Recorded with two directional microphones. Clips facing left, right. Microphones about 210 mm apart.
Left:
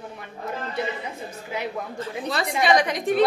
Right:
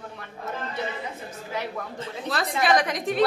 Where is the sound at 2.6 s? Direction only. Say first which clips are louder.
Left 2 dB; centre (ahead or behind).